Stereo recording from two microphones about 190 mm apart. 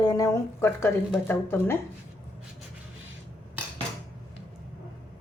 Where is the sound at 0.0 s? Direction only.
20° left (ahead or behind).